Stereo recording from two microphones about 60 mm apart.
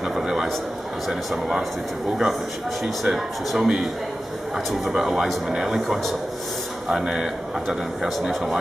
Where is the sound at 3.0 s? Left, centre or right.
Centre.